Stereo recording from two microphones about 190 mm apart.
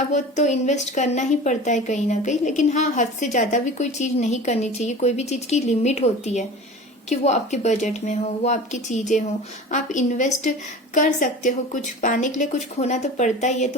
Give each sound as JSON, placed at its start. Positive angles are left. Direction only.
{"t": 0.1, "sound": "a woman's voice", "side_deg": 40}